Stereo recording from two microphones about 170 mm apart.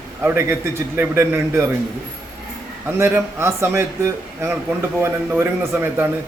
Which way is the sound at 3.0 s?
15° right (ahead or behind).